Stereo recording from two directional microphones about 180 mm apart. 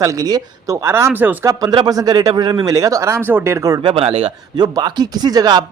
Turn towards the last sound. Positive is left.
turn(degrees=-25)  # may be behind; listen again after turning